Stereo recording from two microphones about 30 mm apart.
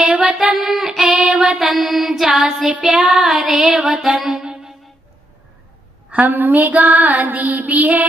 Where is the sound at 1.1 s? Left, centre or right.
Right.